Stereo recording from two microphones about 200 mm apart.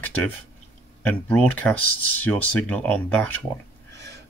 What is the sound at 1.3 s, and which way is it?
Speech, 5° left (ahead or behind).